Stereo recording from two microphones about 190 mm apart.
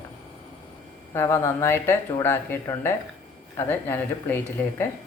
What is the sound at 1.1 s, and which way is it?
Speech, 15° left (ahead or behind).